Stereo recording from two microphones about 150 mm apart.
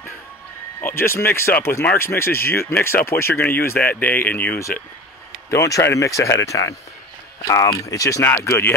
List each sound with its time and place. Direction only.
0.7 s speech: 15° left (ahead or behind)